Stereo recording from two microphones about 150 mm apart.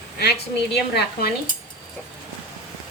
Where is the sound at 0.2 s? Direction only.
90° left.